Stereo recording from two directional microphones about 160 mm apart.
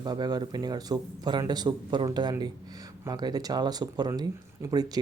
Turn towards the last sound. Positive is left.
turn(degrees=-25)  # may be behind; listen again after turning